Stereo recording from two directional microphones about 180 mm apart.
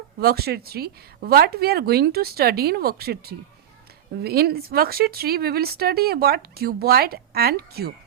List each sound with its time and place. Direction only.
0.2 s speech: 60° right (ahead or behind)